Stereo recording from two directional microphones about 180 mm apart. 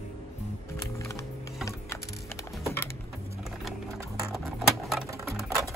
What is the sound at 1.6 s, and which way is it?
Typing, 15° left (ahead or behind).